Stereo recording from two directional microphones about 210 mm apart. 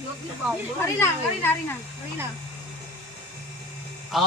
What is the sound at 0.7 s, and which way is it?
A woman's voice, 10° left (ahead or behind).